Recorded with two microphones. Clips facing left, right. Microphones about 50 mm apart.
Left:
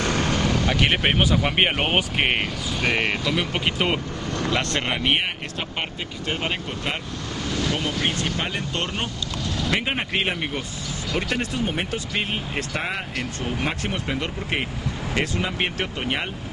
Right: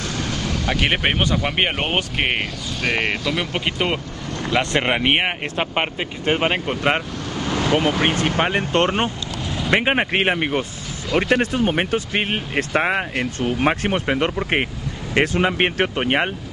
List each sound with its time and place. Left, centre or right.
0.0 s vehicle: left
0.7 s speech: centre
4.6 s speech: right